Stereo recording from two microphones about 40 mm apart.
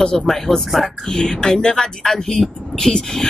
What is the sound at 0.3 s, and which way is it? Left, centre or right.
Speech, centre.